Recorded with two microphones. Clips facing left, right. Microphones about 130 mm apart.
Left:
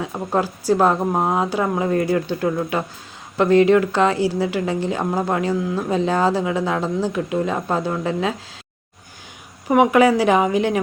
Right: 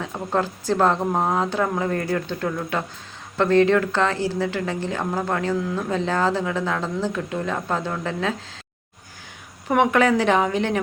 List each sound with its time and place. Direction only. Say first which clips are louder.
0.0 s a woman's voice: left 2 dB; 10° left (ahead or behind)
9.6 s a woman's voice: left 4 dB; 10° left (ahead or behind)